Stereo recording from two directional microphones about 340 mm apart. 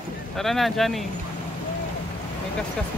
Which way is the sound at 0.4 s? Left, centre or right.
Centre.